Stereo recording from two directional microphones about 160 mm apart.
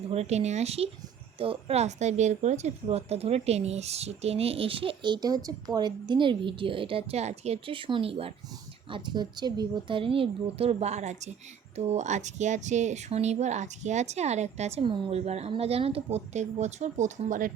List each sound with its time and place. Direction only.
0.1 s a woman's voice: 40° right (ahead or behind)